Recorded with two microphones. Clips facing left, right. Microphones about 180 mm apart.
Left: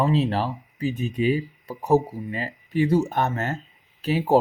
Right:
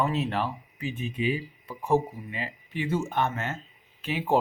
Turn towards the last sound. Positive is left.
turn(degrees=40)  # may be behind; listen again after turning